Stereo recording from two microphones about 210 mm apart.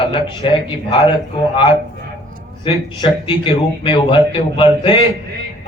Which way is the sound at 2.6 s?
25° left (ahead or behind).